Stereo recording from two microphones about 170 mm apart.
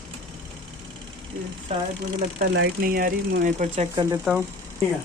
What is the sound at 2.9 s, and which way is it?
Speech, 55° right (ahead or behind).